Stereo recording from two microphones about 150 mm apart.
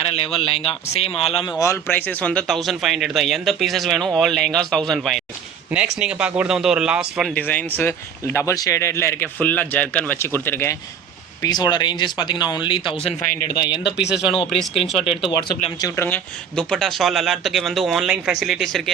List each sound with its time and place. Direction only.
0.0 s speech: 40° left (ahead or behind)
1.5 s speech: 25° left (ahead or behind); by 7.3 s 5° right (ahead or behind)
7.3 s speech: 10° left (ahead or behind)
11.4 s speech: 25° left (ahead or behind)
13.9 s speech: 5° right (ahead or behind)
15.8 s speech: 15° left (ahead or behind)